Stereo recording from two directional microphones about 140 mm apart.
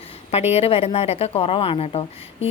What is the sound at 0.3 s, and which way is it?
A woman's voice, 50° left (ahead or behind).